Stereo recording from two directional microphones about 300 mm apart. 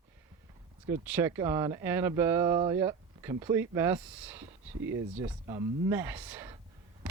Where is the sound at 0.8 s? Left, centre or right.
Centre.